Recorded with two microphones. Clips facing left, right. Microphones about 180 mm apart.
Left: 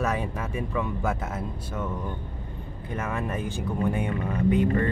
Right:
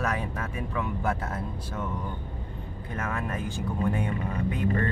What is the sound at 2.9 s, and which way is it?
Speech, 15° left (ahead or behind).